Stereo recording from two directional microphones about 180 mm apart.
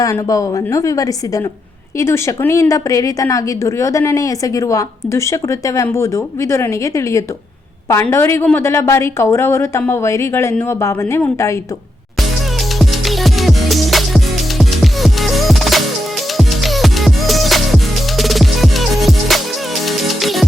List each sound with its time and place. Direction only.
0.0 s a woman's voice: 20° left (ahead or behind)
12.8 s music: centre (ahead or behind)